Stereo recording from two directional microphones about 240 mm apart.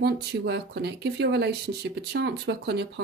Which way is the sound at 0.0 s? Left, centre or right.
Right.